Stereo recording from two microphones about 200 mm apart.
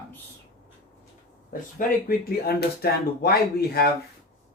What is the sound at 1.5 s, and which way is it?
Speech, 45° left (ahead or behind).